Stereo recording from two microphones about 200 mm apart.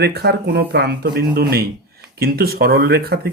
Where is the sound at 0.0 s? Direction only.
55° right (ahead or behind).